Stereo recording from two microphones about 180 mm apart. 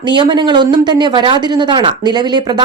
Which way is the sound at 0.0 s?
25° right (ahead or behind).